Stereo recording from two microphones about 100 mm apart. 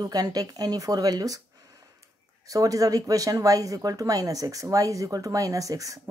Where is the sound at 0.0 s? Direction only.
40° right (ahead or behind).